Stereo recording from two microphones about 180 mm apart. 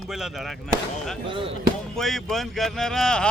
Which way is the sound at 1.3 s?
30° right (ahead or behind).